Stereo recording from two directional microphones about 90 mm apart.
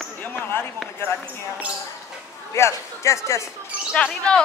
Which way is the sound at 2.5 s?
30° left (ahead or behind).